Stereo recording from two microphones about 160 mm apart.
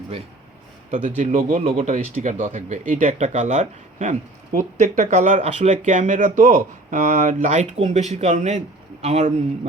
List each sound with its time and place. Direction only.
0.9 s speech: 50° right (ahead or behind)